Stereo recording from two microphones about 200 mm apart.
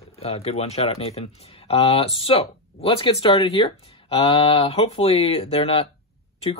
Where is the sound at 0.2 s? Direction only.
30° left (ahead or behind).